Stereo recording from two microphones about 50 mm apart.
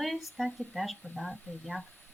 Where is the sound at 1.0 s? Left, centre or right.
Left.